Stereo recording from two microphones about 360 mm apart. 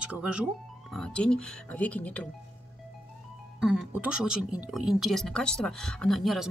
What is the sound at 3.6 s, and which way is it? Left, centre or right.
Speech, centre.